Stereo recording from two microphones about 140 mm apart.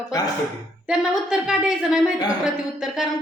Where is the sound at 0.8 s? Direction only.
5° right (ahead or behind).